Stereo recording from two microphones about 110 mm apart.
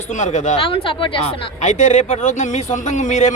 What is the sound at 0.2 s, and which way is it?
Speech, 90° left.